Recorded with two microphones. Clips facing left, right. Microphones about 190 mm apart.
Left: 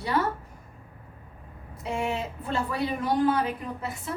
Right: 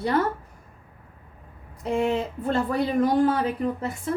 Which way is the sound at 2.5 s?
55° right (ahead or behind).